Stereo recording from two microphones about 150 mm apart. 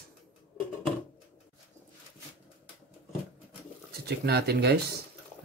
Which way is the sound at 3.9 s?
90° right.